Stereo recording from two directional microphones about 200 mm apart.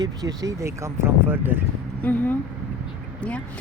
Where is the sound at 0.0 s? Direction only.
20° right (ahead or behind).